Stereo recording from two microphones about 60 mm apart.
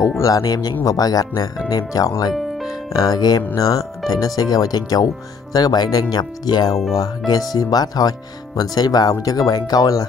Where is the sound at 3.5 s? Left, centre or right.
Left.